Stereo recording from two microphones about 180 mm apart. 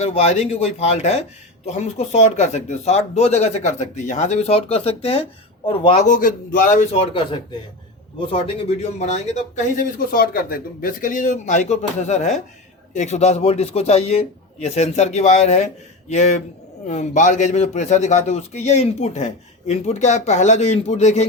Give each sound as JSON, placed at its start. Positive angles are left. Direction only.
{"t": 0.0, "sound": "a man's voice", "side_deg": 35}
{"t": 6.1, "sound": "a man's voice", "side_deg": 50}